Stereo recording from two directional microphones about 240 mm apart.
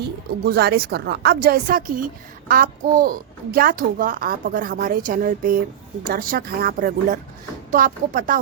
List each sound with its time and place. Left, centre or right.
0.0 s a child's voice: right